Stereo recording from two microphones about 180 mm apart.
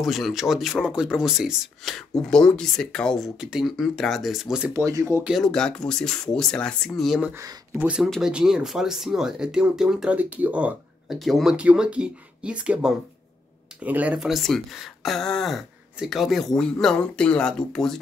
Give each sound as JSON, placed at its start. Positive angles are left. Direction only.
{"t": 0.0, "sound": "speech", "side_deg": 0}
{"t": 4.8, "sound": "speech", "side_deg": -15}
{"t": 5.3, "sound": "speech", "side_deg": 0}